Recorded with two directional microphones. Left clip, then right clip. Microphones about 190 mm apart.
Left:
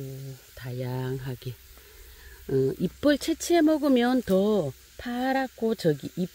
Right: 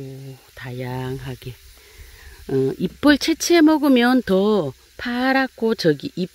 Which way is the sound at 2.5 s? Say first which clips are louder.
Right 5 dB; 20° right (ahead or behind).